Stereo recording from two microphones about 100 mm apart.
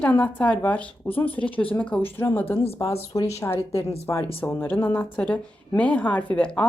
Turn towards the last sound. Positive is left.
turn(degrees=15)  # may be behind; listen again after turning